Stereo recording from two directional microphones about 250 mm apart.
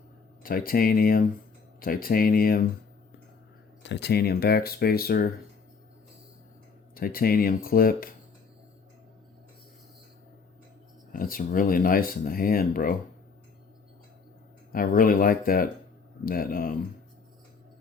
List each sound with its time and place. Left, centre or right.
0.4 s speech: left
3.8 s speech: left
6.9 s speech: left
11.1 s speech: left
14.7 s speech: left